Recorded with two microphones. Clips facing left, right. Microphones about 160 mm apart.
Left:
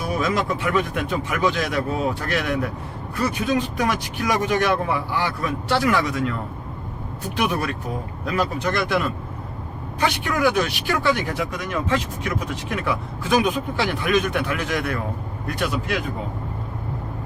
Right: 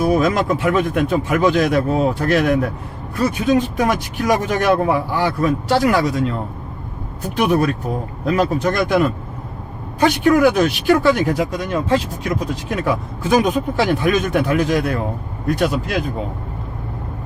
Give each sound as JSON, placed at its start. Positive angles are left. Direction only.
{"t": 0.0, "sound": "speech", "side_deg": -45}
{"t": 7.3, "sound": "speech", "side_deg": -45}